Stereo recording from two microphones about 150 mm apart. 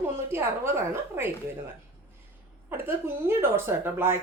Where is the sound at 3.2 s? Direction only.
15° right (ahead or behind).